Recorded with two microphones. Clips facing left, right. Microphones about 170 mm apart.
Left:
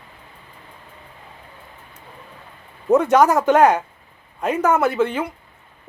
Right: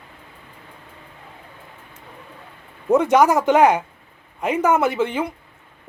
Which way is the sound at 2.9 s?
10° right (ahead or behind).